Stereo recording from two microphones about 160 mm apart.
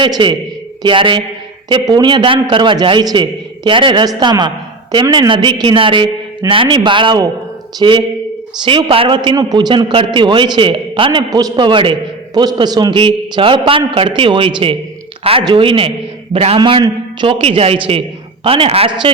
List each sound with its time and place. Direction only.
0.0 s a man's voice: 30° right (ahead or behind)